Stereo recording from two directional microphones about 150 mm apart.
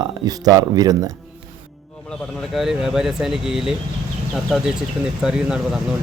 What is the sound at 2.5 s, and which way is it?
Speech, centre (ahead or behind).